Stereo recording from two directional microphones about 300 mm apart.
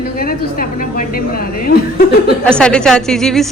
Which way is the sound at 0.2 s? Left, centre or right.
Left.